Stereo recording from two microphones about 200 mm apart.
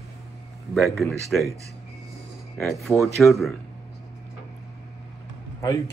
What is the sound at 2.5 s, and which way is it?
Speech, centre (ahead or behind).